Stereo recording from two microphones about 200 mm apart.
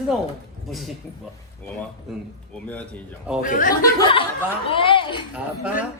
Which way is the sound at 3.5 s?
45° left (ahead or behind).